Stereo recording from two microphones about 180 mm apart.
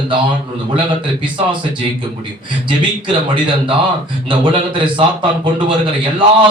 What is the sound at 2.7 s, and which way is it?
A man's voice, 25° right (ahead or behind).